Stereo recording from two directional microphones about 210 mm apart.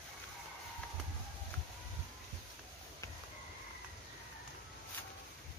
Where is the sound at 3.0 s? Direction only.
15° left (ahead or behind).